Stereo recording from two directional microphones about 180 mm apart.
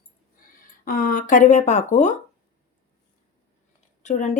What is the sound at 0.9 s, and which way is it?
Speech, 50° left (ahead or behind).